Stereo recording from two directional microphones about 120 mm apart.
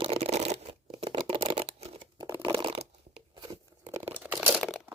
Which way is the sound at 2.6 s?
50° right (ahead or behind).